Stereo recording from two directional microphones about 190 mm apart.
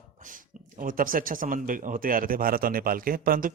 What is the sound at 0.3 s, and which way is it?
Speech, 45° right (ahead or behind).